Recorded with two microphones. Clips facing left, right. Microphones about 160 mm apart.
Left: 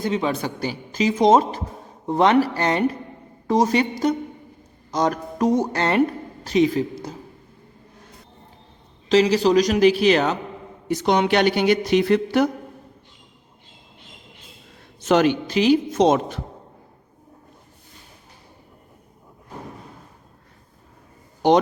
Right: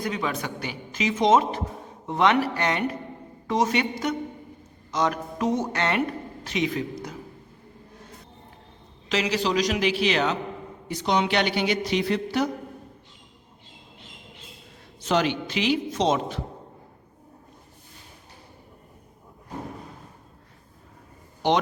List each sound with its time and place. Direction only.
0.0 s a woman's voice: 30° left (ahead or behind)
4.9 s a woman's voice: 40° left (ahead or behind)
9.0 s a woman's voice: 35° left (ahead or behind); by 12.5 s 55° left (ahead or behind)
15.0 s a woman's voice: 50° left (ahead or behind)